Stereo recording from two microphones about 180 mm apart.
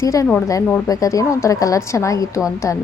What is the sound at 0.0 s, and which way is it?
A woman's voice, 20° left (ahead or behind).